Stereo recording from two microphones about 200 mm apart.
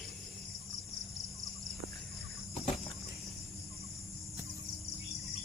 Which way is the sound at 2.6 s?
30° left (ahead or behind).